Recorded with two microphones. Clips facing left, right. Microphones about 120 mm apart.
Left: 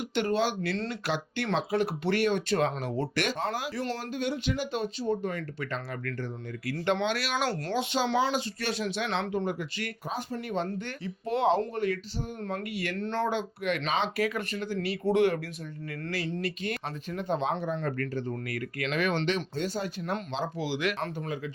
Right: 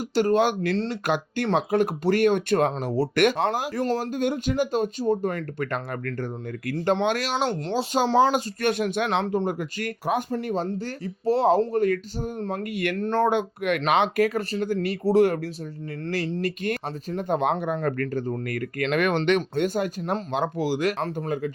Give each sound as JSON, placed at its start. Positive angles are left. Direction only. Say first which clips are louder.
{"t": 0.1, "sound": "speech", "louder": "right 7 dB", "side_deg": -40}
{"t": 2.7, "sound": "speech", "louder": "right 6 dB", "side_deg": -35}
{"t": 3.2, "sound": "speech", "louder": "right 11 dB", "side_deg": -60}
{"t": 3.5, "sound": "speech", "louder": "right 7 dB", "side_deg": -45}
{"t": 7.3, "sound": "speech", "louder": "right 4 dB", "side_deg": -25}
{"t": 7.9, "sound": "speech", "louder": "right 8 dB", "side_deg": -40}
{"t": 9.2, "sound": "speech", "louder": "right 5 dB", "side_deg": -40}
{"t": 10.3, "sound": "speech", "louder": "right 5 dB", "side_deg": -35}
{"t": 14.3, "sound": "speech", "louder": "right 6 dB", "side_deg": -40}
{"t": 20.0, "sound": "speech", "louder": "right 5 dB", "side_deg": -40}
{"t": 20.3, "sound": "speech", "louder": "right 7 dB", "side_deg": -50}